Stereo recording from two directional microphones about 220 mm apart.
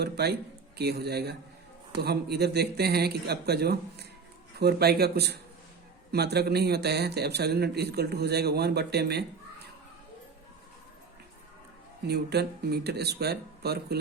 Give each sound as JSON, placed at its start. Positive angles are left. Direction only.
{"t": 0.0, "sound": "a man's voice", "side_deg": -45}
{"t": 12.0, "sound": "a man's voice", "side_deg": -45}